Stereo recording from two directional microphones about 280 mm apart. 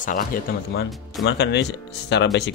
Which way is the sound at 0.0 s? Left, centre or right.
Left.